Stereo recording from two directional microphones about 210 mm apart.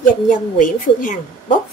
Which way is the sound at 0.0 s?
40° left (ahead or behind).